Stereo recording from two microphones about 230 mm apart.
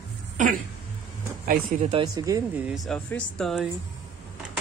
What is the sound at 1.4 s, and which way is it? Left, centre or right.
Speech, right.